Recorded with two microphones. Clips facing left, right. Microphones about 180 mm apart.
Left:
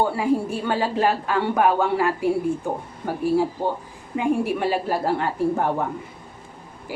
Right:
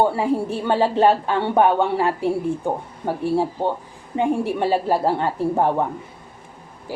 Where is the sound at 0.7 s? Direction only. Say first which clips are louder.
Right 5 dB; 30° right (ahead or behind).